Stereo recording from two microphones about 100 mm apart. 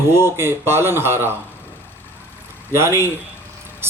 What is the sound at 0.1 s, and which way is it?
A man's voice, 25° right (ahead or behind).